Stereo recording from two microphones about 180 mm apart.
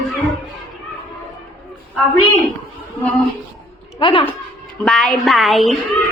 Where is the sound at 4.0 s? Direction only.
30° left (ahead or behind).